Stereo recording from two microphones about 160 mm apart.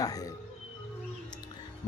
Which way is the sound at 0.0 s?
20° left (ahead or behind).